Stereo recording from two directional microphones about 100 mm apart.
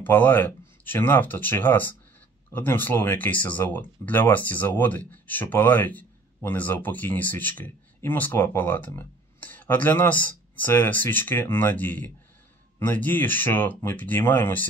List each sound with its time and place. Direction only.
0.0 s speech: 20° left (ahead or behind)